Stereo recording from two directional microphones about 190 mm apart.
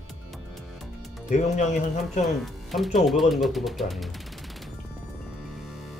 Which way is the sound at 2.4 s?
Centre (ahead or behind).